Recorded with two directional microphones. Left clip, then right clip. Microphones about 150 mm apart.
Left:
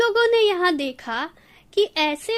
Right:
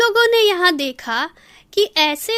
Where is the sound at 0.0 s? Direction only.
25° right (ahead or behind).